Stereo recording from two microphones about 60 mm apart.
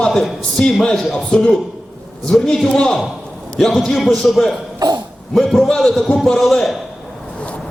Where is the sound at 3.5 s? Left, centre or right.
Centre.